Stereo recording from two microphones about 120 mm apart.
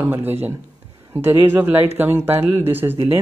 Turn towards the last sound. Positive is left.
turn(degrees=-20)  # may be behind; listen again after turning